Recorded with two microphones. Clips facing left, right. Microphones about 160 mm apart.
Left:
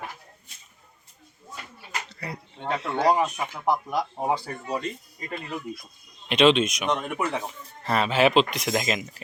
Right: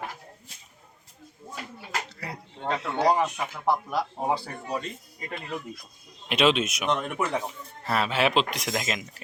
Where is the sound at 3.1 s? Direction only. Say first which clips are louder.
Left 1 dB; 15° left (ahead or behind).